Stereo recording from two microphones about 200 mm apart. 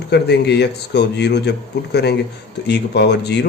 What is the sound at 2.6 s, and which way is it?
Speech, 55° left (ahead or behind).